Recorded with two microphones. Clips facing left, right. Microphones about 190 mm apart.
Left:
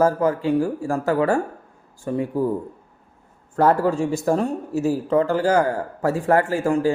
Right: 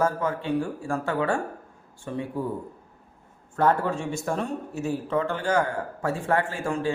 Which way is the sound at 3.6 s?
40° left (ahead or behind).